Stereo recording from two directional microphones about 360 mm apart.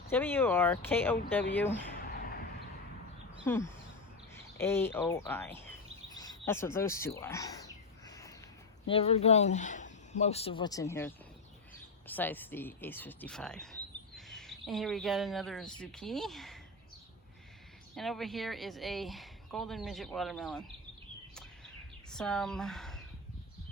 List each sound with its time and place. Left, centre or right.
0.1 s speech: centre
2.0 s a sound: left
3.4 s speech: centre
8.0 s a sound: centre
8.9 s speech: centre
17.9 s speech: centre
22.1 s speech: centre